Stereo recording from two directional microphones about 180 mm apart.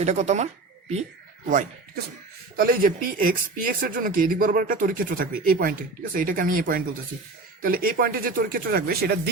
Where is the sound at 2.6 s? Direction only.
50° right (ahead or behind).